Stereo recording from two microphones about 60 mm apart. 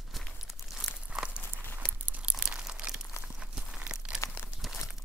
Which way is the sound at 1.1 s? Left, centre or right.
Centre.